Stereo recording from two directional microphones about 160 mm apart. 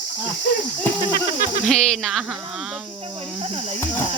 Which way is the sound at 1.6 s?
5° left (ahead or behind).